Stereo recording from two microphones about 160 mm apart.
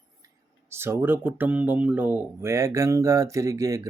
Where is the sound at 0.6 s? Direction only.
15° right (ahead or behind).